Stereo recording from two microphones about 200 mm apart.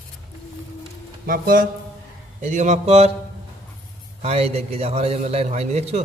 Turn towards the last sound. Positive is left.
turn(degrees=-30)  # may be behind; listen again after turning